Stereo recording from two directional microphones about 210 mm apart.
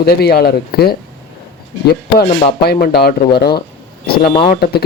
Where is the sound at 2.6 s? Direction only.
50° left (ahead or behind).